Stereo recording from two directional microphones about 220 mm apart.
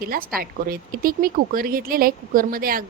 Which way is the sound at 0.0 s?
40° right (ahead or behind).